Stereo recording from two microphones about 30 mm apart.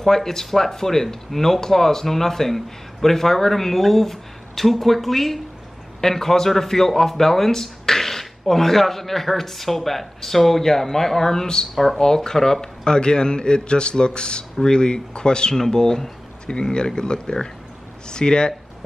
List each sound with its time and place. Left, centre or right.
0.0 s a man's voice: centre
11.7 s a man's voice: centre
12.0 s a man's voice: centre
12.8 s a man's voice: left
15.5 s a man's voice: centre